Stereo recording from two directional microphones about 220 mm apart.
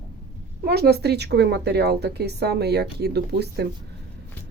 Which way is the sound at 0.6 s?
45° right (ahead or behind).